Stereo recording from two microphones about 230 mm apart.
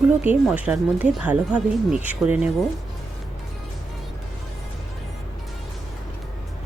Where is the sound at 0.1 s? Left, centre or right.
Centre.